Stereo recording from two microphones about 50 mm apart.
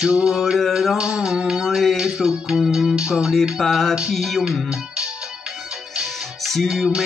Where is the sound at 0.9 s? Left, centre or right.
Centre.